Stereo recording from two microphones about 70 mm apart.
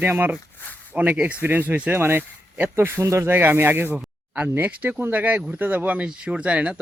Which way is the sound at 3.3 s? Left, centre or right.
Right.